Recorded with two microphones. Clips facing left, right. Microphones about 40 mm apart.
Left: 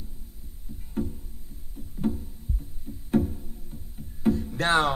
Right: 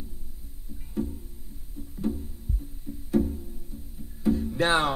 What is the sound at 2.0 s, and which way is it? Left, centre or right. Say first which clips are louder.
Music: left 2 dB; left.